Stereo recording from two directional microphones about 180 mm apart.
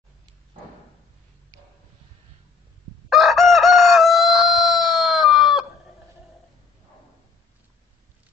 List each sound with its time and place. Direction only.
3.1 s chicken: centre (ahead or behind)